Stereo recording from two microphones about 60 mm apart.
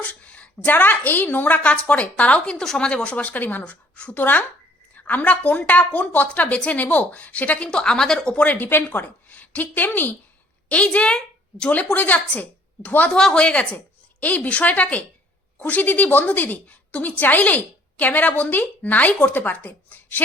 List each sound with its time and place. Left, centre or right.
0.1 s a sound: left
0.6 s a woman's voice: left
7.7 s a woman's voice: centre
8.4 s a woman's voice: left
10.7 s a woman's voice: centre
13.1 s a woman's voice: centre
13.4 s a woman's voice: left